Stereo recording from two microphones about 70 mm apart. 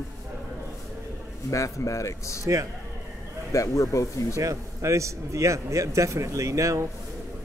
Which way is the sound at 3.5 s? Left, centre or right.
Left.